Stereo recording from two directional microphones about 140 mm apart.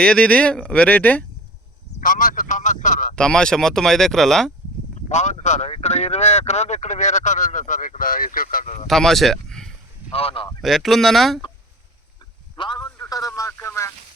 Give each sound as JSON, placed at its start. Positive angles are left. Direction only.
{"t": 0.0, "sound": "speech", "side_deg": 5}
{"t": 2.0, "sound": "speech", "side_deg": 75}
{"t": 3.2, "sound": "speech", "side_deg": 5}
{"t": 5.0, "sound": "speech", "side_deg": 55}
{"t": 8.9, "sound": "speech", "side_deg": 0}
{"t": 10.1, "sound": "speech", "side_deg": 45}
{"t": 10.6, "sound": "speech", "side_deg": 0}
{"t": 12.5, "sound": "a man's voice", "side_deg": 35}